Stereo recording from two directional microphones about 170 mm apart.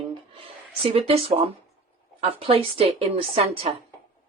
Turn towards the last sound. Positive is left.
turn(degrees=-35)  # may be behind; listen again after turning